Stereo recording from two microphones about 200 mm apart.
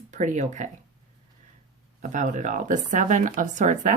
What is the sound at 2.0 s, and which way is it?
Speech, 40° right (ahead or behind).